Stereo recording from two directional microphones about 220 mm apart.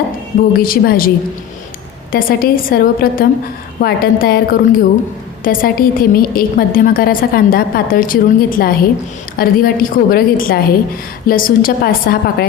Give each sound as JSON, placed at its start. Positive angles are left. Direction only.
{"t": 0.6, "sound": "a woman's voice", "side_deg": 40}
{"t": 2.1, "sound": "a woman's voice", "side_deg": 40}